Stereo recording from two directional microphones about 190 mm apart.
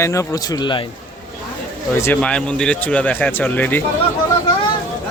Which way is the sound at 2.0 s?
10° left (ahead or behind).